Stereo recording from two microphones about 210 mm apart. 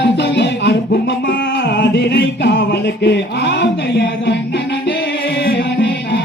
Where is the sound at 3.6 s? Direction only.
55° left (ahead or behind).